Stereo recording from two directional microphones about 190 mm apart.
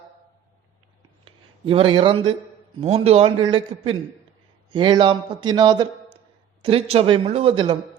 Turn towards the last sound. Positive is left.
turn(degrees=-25)  # may be behind; listen again after turning